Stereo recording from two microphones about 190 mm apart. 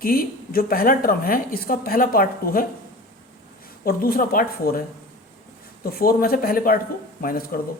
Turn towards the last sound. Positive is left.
turn(degrees=50)  # may be behind; listen again after turning